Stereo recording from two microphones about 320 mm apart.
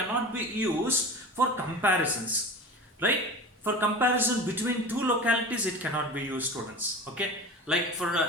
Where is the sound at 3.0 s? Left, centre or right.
Centre.